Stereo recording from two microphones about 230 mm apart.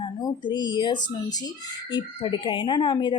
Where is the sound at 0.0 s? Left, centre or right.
Centre.